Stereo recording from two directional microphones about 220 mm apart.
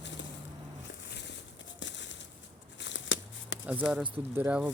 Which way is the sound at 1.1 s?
50° left (ahead or behind).